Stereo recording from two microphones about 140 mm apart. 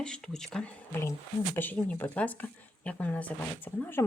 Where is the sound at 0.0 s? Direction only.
5° left (ahead or behind).